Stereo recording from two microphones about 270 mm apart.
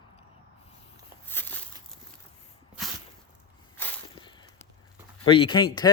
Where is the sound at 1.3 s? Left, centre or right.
Centre.